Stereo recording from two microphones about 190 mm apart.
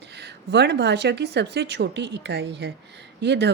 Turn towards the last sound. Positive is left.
turn(degrees=-65)  # may be behind; listen again after turning